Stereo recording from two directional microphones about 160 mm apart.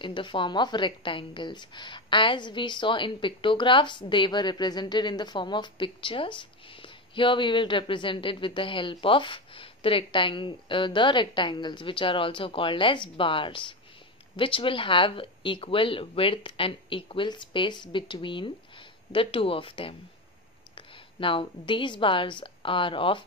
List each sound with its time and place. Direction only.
0.0 s a woman's voice: 30° left (ahead or behind)